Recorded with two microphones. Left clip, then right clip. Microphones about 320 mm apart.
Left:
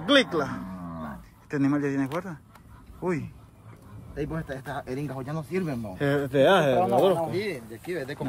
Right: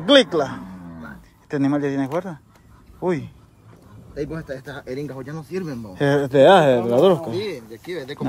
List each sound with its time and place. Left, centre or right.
0.0 s a man's voice: centre
4.4 s speech: centre
5.9 s speech: centre
7.3 s speech: centre